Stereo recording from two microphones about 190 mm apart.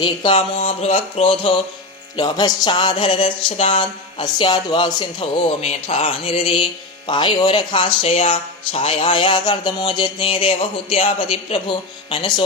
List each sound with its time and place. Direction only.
0.0 s speech: 25° left (ahead or behind)